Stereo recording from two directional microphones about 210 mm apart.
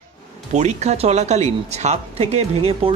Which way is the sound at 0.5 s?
35° right (ahead or behind).